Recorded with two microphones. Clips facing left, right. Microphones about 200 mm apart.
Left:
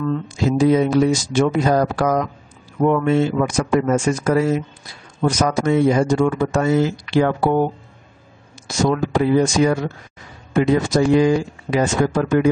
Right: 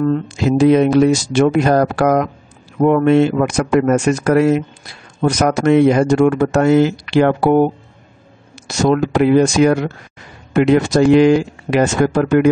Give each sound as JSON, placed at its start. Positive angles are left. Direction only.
{"t": 0.4, "sound": "speech", "side_deg": -70}
{"t": 8.6, "sound": "speech", "side_deg": -70}